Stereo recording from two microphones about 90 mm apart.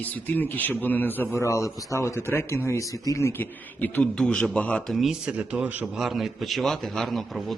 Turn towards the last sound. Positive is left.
turn(degrees=0)  # may be behind; listen again after turning